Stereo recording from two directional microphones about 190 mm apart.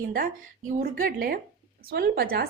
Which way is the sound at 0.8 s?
50° right (ahead or behind).